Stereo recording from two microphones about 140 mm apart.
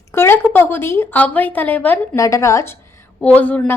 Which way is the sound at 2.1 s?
20° left (ahead or behind).